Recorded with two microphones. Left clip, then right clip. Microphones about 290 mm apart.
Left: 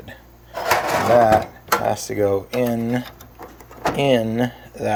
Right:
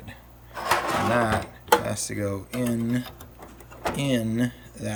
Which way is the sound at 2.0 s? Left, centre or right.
Centre.